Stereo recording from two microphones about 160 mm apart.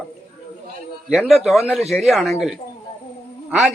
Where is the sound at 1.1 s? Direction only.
Centre (ahead or behind).